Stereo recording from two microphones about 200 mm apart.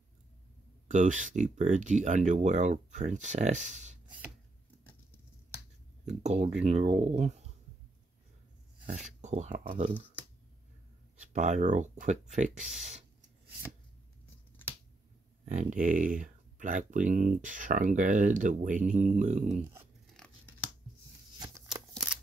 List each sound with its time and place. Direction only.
0.8 s speech: 40° right (ahead or behind)
6.0 s speech: 35° right (ahead or behind)
8.8 s speech: 35° right (ahead or behind)
11.3 s speech: 35° right (ahead or behind)
15.4 s speech: 40° right (ahead or behind)
20.2 s a sound: 5° left (ahead or behind)